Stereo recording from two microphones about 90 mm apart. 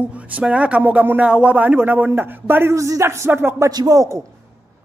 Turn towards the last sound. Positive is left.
turn(degrees=-35)  # may be behind; listen again after turning